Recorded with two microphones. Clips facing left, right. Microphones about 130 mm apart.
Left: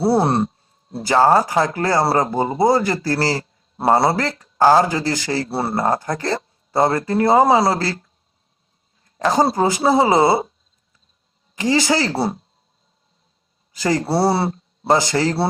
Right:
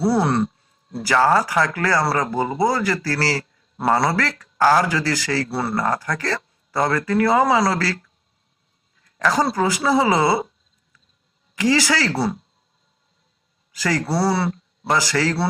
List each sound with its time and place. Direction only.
0.0 s speech: 25° left (ahead or behind)
11.5 s speech: 25° left (ahead or behind)
13.7 s speech: 25° left (ahead or behind)